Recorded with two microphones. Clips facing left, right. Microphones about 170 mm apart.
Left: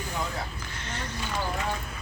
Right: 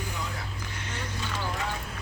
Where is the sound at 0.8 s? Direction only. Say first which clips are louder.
Left 2 dB; 10° right (ahead or behind).